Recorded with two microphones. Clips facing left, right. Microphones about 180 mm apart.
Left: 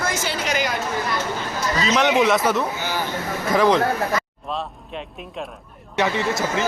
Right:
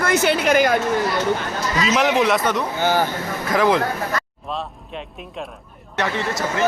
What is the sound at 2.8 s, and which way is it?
Speech, 50° right (ahead or behind).